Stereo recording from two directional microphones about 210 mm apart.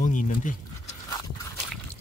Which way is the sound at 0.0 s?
35° left (ahead or behind).